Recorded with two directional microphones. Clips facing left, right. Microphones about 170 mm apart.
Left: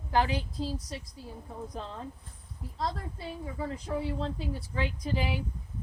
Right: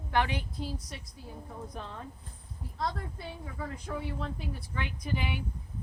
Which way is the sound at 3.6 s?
30° left (ahead or behind).